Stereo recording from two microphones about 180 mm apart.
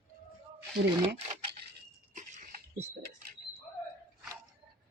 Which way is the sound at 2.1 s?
45° right (ahead or behind).